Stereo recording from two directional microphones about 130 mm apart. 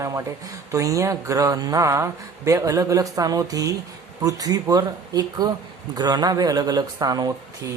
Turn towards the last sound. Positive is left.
turn(degrees=-30)  # may be behind; listen again after turning